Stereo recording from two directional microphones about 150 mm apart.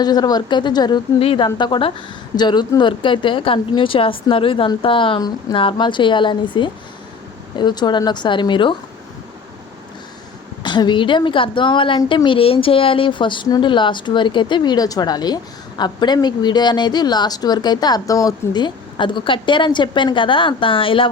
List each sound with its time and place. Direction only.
0.0 s a woman's voice: 25° left (ahead or behind)
10.6 s a woman's voice: 30° left (ahead or behind)